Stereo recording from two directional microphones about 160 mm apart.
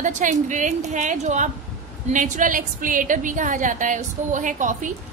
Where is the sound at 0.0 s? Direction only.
50° right (ahead or behind).